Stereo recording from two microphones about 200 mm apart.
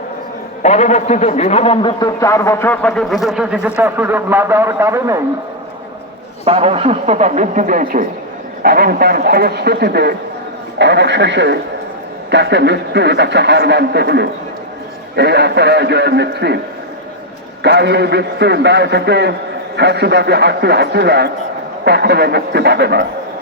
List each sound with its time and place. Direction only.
0.6 s a man's voice: 35° left (ahead or behind); by 5.2 s 15° right (ahead or behind)
6.4 s a man's voice: 30° right (ahead or behind); by 16.6 s 55° right (ahead or behind)
17.6 s a man's voice: 60° right (ahead or behind)